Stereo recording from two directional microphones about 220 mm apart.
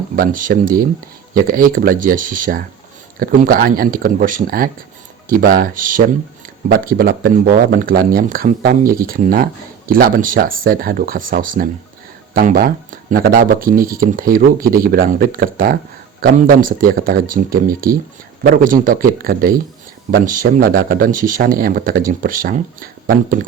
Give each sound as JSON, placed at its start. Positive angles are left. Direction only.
{"t": 0.2, "sound": "speech", "side_deg": -40}